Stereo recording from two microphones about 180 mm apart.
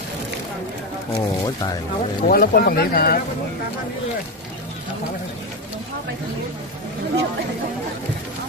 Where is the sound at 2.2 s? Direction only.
55° left (ahead or behind).